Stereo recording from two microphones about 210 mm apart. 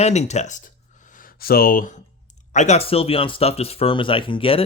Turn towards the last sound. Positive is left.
turn(degrees=25)  # may be behind; listen again after turning